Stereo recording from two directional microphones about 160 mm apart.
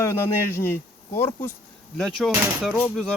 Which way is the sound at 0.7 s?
15° left (ahead or behind).